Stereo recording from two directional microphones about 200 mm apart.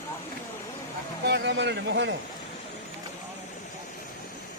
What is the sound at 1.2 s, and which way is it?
Speech, 55° right (ahead or behind).